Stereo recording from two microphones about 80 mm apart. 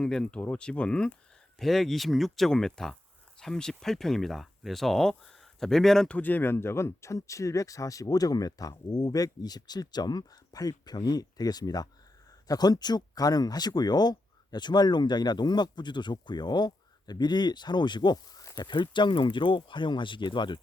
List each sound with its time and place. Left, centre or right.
0.0 s speech: centre
6.1 s speech: left